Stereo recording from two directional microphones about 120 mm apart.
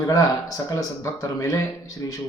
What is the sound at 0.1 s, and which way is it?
A man's voice, 30° left (ahead or behind).